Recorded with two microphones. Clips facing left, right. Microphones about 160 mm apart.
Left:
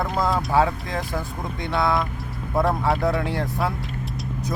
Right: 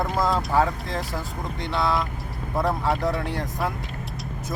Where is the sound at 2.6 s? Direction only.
Centre (ahead or behind).